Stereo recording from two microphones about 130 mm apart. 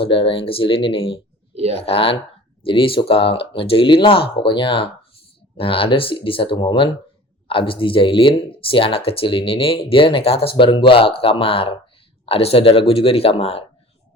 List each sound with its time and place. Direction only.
0.0 s speech: 40° left (ahead or behind)